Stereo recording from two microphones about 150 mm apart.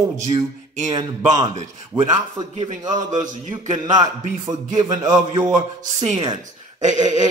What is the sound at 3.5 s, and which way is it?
A man's voice, 30° right (ahead or behind).